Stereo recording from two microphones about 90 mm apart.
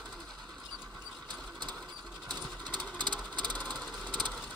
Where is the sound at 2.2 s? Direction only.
55° right (ahead or behind).